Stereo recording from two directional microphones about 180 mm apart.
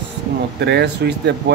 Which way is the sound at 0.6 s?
70° right (ahead or behind).